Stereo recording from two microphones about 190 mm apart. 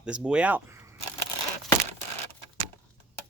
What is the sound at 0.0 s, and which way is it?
Speech, 5° right (ahead or behind).